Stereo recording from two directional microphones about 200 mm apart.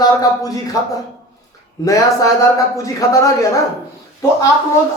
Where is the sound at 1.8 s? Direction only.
15° left (ahead or behind).